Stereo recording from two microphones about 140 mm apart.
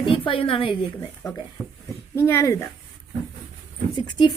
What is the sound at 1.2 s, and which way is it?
Speech, 25° left (ahead or behind).